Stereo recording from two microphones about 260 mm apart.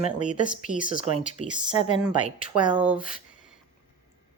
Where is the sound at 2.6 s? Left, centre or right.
Centre.